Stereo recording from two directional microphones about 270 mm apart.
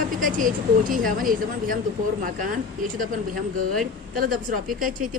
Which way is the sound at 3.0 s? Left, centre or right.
Right.